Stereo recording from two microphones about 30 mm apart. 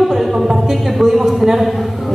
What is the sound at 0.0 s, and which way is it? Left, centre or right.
Music, centre.